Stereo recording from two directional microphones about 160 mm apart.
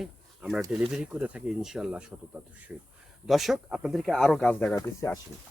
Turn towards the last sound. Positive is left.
turn(degrees=20)  # may be behind; listen again after turning